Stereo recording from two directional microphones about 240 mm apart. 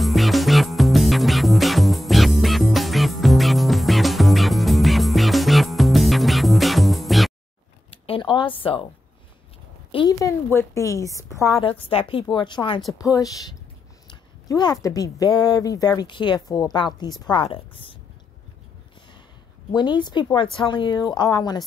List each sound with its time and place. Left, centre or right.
0.0 s music: centre
7.9 s a sound: left
9.8 s a woman's voice: centre
19.7 s a woman's voice: centre